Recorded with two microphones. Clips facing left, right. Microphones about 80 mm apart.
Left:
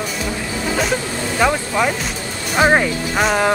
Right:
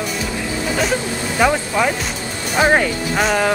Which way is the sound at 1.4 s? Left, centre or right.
Centre.